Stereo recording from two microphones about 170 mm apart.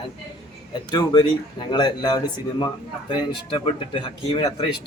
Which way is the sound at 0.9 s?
25° left (ahead or behind).